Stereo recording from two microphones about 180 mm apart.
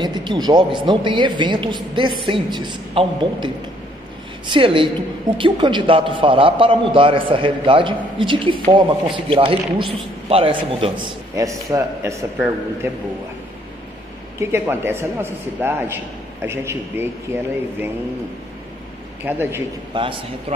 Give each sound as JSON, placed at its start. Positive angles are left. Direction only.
{"t": 0.0, "sound": "a man's voice", "side_deg": -25}
{"t": 14.4, "sound": "a man's voice", "side_deg": -15}
{"t": 19.2, "sound": "a man's voice", "side_deg": -10}
{"t": 19.9, "sound": "a man's voice", "side_deg": -30}